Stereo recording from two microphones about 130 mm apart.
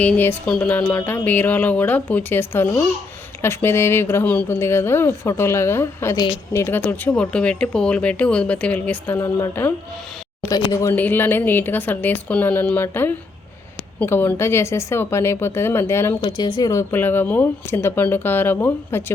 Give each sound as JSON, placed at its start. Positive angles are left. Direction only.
{"t": 0.0, "sound": "a woman's voice", "side_deg": 15}
{"t": 10.9, "sound": "a woman's voice", "side_deg": 15}
{"t": 16.2, "sound": "speech", "side_deg": 35}
{"t": 16.9, "sound": "speech", "side_deg": 15}